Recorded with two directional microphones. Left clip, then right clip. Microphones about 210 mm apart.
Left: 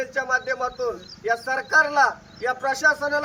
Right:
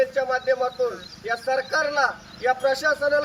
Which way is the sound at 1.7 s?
25° left (ahead or behind).